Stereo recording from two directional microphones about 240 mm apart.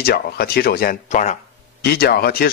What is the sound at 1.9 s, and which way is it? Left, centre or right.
Speech, left.